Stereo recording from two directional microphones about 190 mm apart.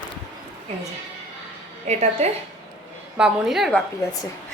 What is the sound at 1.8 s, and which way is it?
Speech, 35° right (ahead or behind).